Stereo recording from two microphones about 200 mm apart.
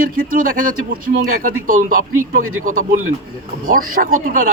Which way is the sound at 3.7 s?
45° right (ahead or behind).